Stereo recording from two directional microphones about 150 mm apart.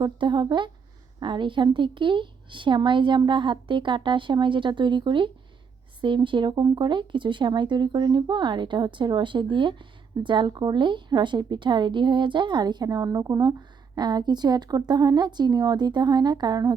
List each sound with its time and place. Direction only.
0.0 s a woman's voice: 30° right (ahead or behind)